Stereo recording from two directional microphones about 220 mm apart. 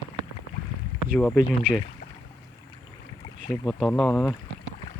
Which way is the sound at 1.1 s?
Centre (ahead or behind).